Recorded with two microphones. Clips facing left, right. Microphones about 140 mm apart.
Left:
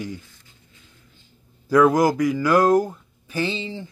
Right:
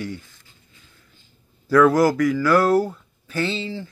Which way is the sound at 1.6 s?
20° left (ahead or behind).